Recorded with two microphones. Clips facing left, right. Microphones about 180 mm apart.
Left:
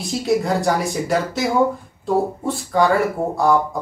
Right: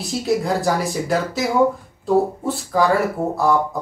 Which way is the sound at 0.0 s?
Centre (ahead or behind).